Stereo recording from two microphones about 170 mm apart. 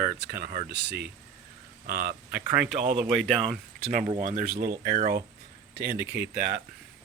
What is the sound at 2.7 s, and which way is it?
Speech, 35° right (ahead or behind).